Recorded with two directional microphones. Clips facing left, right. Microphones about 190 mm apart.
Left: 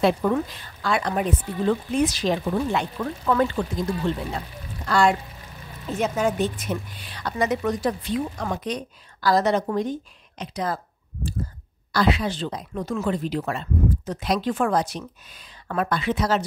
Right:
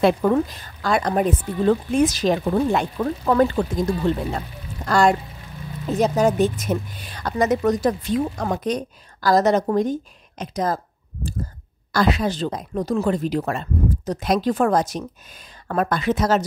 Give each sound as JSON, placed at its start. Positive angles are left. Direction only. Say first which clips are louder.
{"t": 0.0, "sound": "a woman's voice", "louder": "right 3 dB", "side_deg": -45}
{"t": 11.9, "sound": "a woman's voice", "louder": "right 2 dB", "side_deg": -45}